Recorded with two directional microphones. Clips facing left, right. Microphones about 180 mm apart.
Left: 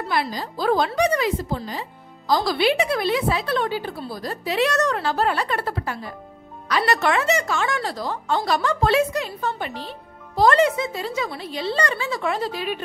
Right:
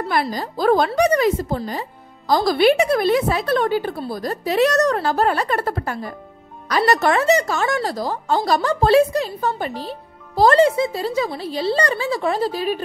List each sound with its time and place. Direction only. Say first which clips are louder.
0.1 s a woman's voice: right 1 dB; 50° right (ahead or behind)